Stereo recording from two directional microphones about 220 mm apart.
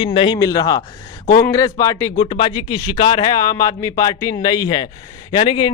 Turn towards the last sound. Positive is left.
turn(degrees=20)  # may be behind; listen again after turning